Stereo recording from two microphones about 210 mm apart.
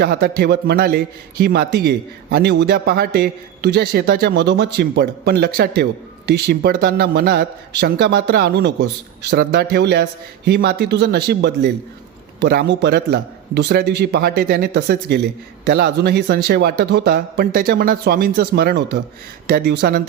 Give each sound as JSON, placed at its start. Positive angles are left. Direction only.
{"t": 0.0, "sound": "a man's voice", "side_deg": -50}